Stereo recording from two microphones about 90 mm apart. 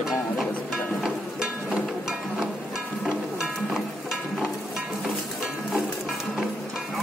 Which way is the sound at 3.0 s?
5° right (ahead or behind).